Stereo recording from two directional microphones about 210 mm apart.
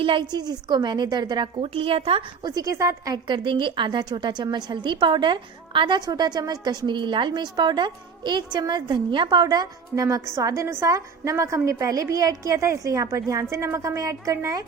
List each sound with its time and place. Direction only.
0.0 s a woman's voice: 25° right (ahead or behind)